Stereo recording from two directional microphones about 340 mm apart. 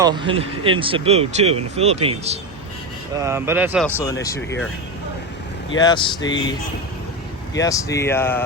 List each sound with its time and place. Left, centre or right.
0.0 s speech: centre
5.8 s speech: centre
7.6 s speech: centre